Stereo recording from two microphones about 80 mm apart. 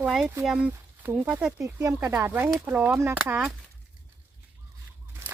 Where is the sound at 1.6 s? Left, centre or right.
Right.